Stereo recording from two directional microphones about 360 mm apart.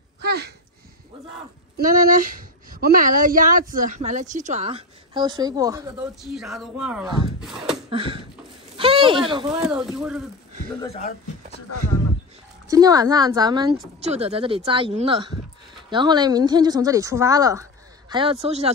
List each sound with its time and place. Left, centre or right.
0.2 s a sound: right
1.8 s a woman's voice: right; by 7.2 s centre
7.9 s a woman's voice: centre
9.6 s speech: centre
10.9 s speech: centre
12.6 s a woman's voice: centre